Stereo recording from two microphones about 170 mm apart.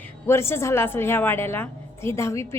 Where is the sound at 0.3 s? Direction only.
15° left (ahead or behind).